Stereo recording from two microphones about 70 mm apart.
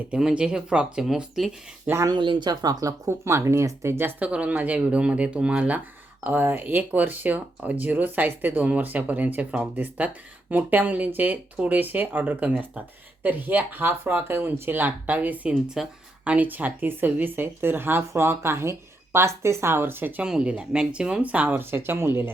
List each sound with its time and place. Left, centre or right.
0.1 s speech: centre
2.0 s speech: right
3.1 s speech: right
4.2 s speech: centre
6.2 s speech: right
15.6 s speech: centre; by 20.2 s right
20.2 s speech: centre; by 22.3 s right